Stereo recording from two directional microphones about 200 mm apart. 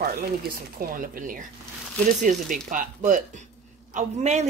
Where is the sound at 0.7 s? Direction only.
45° right (ahead or behind).